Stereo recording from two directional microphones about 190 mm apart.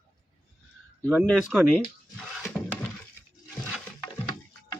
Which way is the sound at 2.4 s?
Centre (ahead or behind).